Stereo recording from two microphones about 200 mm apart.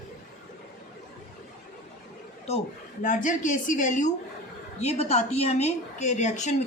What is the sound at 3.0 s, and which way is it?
A woman's voice, 40° left (ahead or behind).